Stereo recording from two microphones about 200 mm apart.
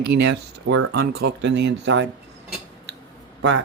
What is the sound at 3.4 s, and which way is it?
Speech, 65° right (ahead or behind).